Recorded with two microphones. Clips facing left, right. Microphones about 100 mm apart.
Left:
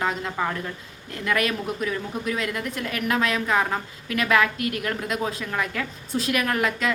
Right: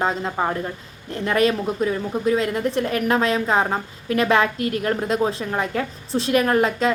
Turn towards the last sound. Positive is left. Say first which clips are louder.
# right 5 dB
turn(degrees=-30)  # may be behind; listen again after turning